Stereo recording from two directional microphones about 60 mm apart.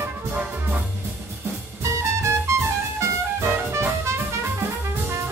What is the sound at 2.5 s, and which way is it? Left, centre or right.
Music, right.